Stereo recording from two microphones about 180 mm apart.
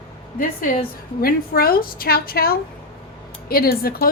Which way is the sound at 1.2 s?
55° left (ahead or behind).